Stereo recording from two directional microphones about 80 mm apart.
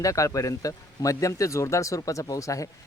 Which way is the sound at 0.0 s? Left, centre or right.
Left.